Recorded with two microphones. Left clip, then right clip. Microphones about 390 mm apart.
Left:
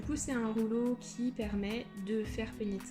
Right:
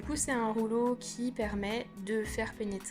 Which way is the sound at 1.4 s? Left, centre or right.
Centre.